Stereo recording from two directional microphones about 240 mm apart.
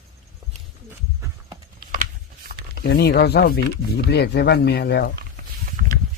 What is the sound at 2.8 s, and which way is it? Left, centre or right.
Speech, left.